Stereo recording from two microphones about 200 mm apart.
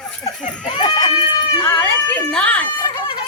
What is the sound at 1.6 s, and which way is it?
Speech, 10° left (ahead or behind).